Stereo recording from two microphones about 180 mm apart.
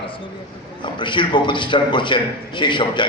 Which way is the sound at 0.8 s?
25° left (ahead or behind).